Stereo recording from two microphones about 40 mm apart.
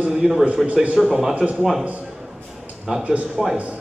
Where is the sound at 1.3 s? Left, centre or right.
Right.